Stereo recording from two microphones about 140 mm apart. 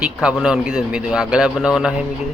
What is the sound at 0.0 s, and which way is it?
Speech, 5° right (ahead or behind).